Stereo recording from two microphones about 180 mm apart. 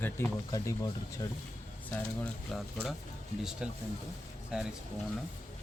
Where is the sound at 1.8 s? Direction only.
10° left (ahead or behind).